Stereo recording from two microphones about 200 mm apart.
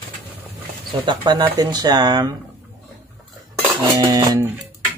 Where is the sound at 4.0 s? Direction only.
20° right (ahead or behind).